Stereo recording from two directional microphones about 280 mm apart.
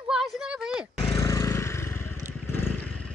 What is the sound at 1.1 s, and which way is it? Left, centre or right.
Vehicle, centre.